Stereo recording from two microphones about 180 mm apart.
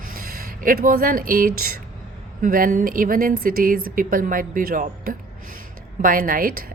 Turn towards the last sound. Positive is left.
turn(degrees=-50)  # may be behind; listen again after turning